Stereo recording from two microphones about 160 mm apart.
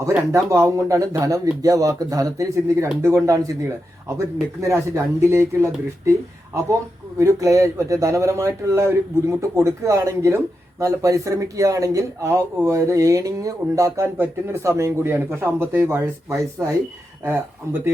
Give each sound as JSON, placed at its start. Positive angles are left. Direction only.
{"t": 0.2, "sound": "speech", "side_deg": -15}
{"t": 4.6, "sound": "speech", "side_deg": -20}